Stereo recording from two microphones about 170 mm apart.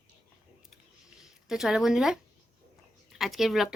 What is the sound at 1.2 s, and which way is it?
A woman's voice, centre (ahead or behind).